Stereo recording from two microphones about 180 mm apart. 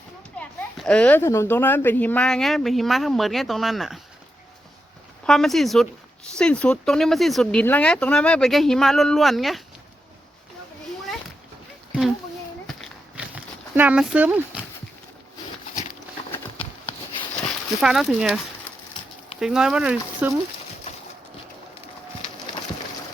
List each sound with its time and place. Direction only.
0.3 s speech: 5° left (ahead or behind)
5.2 s speech: centre (ahead or behind)
11.9 s a sound: centre (ahead or behind)
17.7 s speech: centre (ahead or behind)
19.4 s speech: 5° right (ahead or behind)
20.9 s a sound: 35° left (ahead or behind)